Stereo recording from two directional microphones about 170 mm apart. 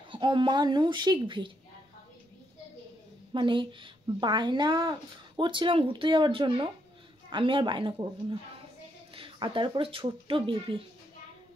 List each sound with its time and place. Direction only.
0.1 s speech: 30° right (ahead or behind)
3.3 s speech: 30° right (ahead or behind)